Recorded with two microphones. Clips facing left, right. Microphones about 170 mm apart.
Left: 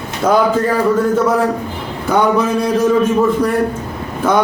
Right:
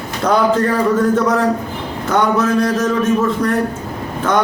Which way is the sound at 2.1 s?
10° left (ahead or behind).